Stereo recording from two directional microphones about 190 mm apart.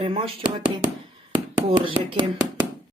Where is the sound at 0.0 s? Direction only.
30° right (ahead or behind).